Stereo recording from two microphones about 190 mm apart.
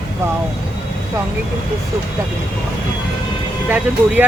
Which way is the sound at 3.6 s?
10° right (ahead or behind).